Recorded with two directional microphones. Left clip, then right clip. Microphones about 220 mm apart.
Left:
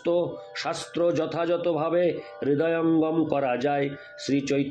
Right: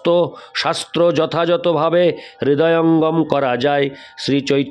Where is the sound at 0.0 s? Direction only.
50° right (ahead or behind).